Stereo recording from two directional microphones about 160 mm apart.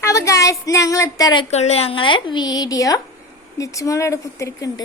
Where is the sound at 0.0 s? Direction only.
20° left (ahead or behind).